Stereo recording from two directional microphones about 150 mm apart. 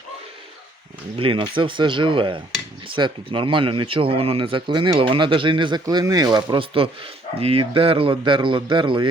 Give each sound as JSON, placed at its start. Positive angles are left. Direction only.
{"t": 1.1, "sound": "speech", "side_deg": -35}